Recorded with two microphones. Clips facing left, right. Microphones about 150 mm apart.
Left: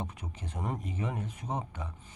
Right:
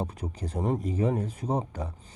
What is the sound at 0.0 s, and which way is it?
Speech, 35° right (ahead or behind).